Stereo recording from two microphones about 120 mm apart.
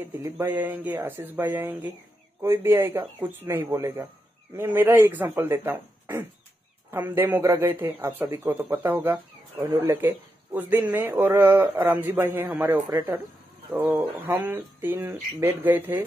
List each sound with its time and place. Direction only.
0.0 s speech: 15° right (ahead or behind)